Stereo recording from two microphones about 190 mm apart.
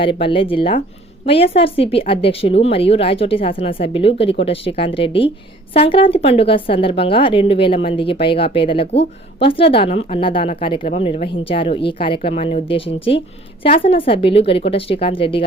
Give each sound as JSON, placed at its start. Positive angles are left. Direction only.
{"t": 0.0, "sound": "a woman's voice", "side_deg": 30}